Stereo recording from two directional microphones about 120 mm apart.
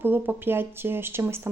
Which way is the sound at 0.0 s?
15° right (ahead or behind).